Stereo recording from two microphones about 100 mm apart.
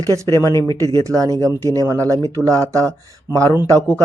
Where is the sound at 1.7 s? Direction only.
35° right (ahead or behind).